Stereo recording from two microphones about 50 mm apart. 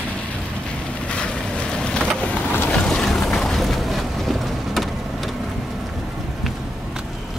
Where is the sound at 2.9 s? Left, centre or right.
Centre.